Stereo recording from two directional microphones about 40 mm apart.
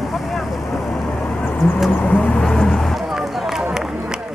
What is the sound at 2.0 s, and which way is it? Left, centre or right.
Speech, left.